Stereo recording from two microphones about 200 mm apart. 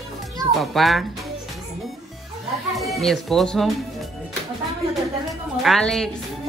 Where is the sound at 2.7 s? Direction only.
Centre (ahead or behind).